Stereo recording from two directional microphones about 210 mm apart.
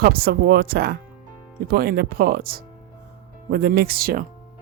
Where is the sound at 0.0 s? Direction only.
50° right (ahead or behind).